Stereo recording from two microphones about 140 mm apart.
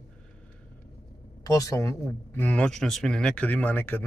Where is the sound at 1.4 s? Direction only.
25° left (ahead or behind).